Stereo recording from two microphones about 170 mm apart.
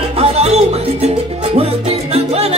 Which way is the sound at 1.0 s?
35° right (ahead or behind).